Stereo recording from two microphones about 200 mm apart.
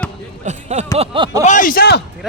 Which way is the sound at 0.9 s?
30° right (ahead or behind).